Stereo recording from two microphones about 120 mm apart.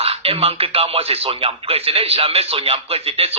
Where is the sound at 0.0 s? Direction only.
55° right (ahead or behind).